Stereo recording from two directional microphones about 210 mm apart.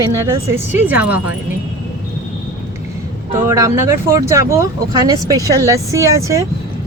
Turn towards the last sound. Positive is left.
turn(degrees=-15)  # may be behind; listen again after turning